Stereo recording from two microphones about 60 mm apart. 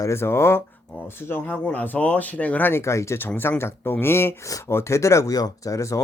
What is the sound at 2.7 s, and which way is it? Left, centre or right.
Speech, left.